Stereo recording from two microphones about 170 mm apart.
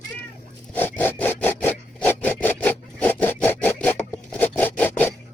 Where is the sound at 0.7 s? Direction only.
10° left (ahead or behind).